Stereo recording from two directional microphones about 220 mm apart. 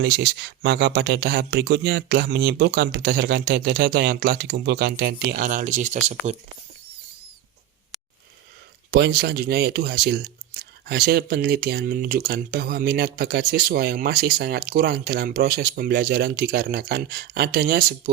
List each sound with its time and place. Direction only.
0.0 s speech: 45° right (ahead or behind); by 6.3 s 30° right (ahead or behind)
9.0 s speech: 45° right (ahead or behind)